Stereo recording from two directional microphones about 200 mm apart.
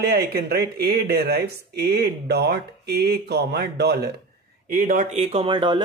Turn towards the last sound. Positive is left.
turn(degrees=-25)  # may be behind; listen again after turning